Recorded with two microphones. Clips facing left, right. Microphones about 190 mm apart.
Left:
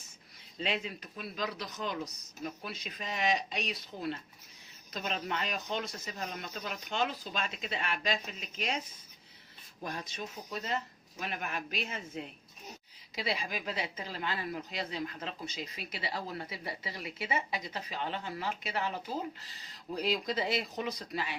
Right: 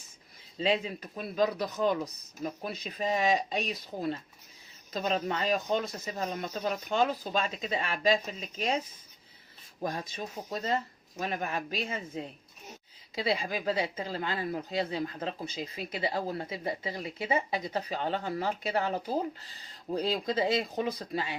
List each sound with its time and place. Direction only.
0.6 s speech: 35° right (ahead or behind)
9.9 s speech: 35° right (ahead or behind)